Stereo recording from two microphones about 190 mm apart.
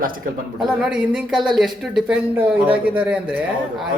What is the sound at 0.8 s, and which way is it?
Speech, 5° right (ahead or behind).